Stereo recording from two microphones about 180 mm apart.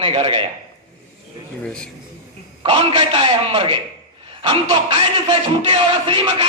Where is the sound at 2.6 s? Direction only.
25° right (ahead or behind).